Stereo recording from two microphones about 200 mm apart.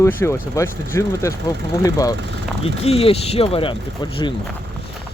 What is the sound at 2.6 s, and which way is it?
Speech, 30° left (ahead or behind).